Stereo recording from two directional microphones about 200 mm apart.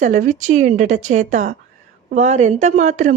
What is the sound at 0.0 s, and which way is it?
A woman's voice, 40° right (ahead or behind).